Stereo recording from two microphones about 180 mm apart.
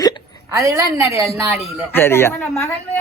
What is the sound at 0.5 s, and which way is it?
Speech, 20° right (ahead or behind).